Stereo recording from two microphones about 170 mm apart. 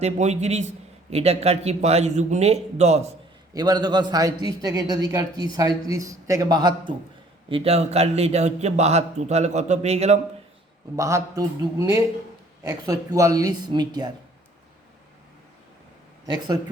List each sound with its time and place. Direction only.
0.0 s a man's voice: 40° right (ahead or behind)
3.5 s a man's voice: 25° right (ahead or behind)
7.5 s a man's voice: 35° right (ahead or behind)
10.9 s a man's voice: 20° right (ahead or behind)